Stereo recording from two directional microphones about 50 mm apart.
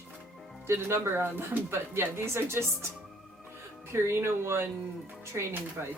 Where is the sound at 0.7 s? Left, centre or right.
Right.